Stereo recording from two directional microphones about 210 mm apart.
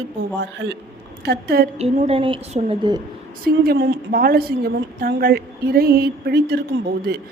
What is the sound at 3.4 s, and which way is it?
Speech, 45° right (ahead or behind).